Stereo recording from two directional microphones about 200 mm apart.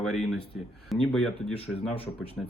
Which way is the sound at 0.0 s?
Centre (ahead or behind).